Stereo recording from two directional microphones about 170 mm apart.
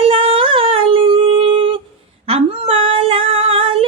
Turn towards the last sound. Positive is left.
turn(degrees=-35)  # may be behind; listen again after turning